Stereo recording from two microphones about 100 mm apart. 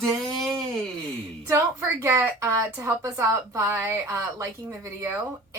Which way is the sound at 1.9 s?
20° right (ahead or behind).